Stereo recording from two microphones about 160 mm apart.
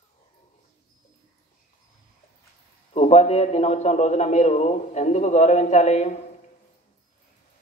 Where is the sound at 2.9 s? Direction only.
40° left (ahead or behind).